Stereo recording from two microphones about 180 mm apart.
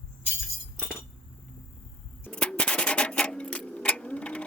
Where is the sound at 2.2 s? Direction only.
5° left (ahead or behind).